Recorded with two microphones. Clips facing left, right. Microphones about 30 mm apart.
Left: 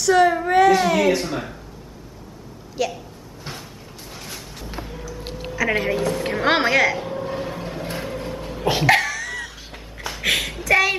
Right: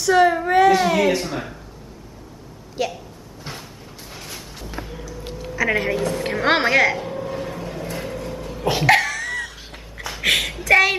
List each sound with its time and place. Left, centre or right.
0.0 s speech: centre
2.8 s a woman's voice: centre
4.1 s music: centre
5.7 s a woman's voice: centre
7.2 s vehicle: centre
8.6 s cough: centre
10.1 s a sound: centre